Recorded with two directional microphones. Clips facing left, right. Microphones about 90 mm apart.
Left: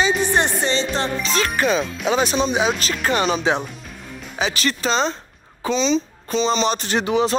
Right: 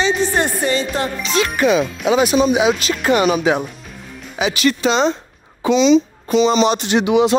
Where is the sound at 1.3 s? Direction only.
40° left (ahead or behind).